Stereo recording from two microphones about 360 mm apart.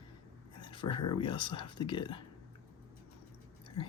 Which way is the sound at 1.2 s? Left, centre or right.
Centre.